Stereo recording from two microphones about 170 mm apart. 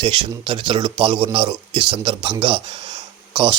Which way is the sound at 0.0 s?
30° right (ahead or behind).